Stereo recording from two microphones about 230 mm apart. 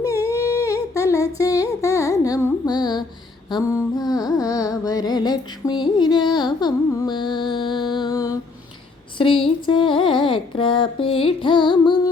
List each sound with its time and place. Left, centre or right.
0.1 s humming: centre
3.5 s carnatic music: centre
9.1 s a sound: left